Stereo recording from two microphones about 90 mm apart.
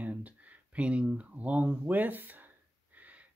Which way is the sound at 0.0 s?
15° right (ahead or behind).